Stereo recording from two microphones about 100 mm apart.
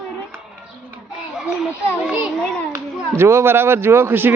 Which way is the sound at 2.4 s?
10° left (ahead or behind).